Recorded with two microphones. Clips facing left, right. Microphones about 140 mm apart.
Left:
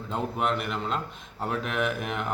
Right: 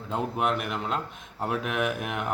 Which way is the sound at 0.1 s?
10° right (ahead or behind).